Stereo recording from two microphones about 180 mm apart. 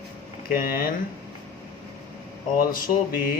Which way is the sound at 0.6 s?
55° left (ahead or behind).